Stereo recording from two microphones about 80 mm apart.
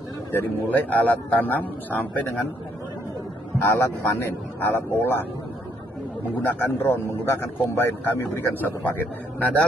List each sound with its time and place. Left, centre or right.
0.3 s a man's voice: left
3.6 s speech: left
6.4 s a man's voice: left